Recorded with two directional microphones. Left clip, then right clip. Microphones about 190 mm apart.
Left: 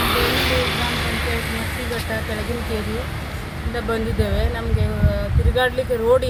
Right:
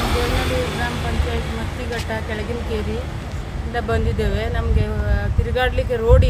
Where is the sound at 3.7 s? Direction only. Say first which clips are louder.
Right 1 dB; 35° right (ahead or behind).